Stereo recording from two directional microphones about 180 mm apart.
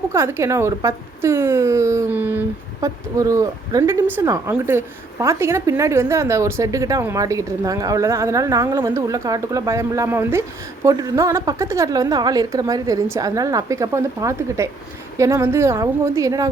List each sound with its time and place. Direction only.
0.1 s a woman's voice: 15° right (ahead or behind)